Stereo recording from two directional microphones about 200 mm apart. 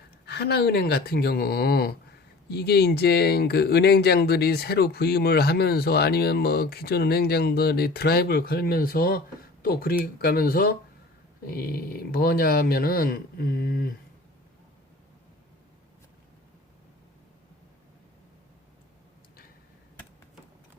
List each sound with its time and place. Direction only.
0.3 s speech: 55° left (ahead or behind)